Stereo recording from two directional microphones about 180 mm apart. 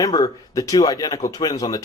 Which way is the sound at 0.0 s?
20° left (ahead or behind).